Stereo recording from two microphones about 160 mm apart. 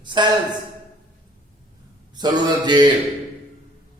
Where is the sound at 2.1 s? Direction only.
25° right (ahead or behind).